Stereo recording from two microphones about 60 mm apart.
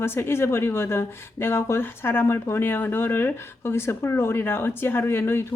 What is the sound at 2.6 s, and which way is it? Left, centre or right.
Speech, left.